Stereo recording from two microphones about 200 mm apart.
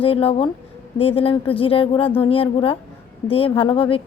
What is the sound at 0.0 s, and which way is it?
A woman's voice, 25° left (ahead or behind).